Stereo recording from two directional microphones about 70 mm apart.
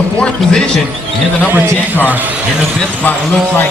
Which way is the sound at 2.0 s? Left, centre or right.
Right.